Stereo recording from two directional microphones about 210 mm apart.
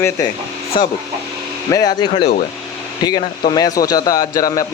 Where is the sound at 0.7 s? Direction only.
20° left (ahead or behind).